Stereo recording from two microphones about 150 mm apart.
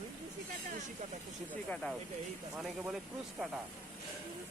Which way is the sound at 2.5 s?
5° right (ahead or behind).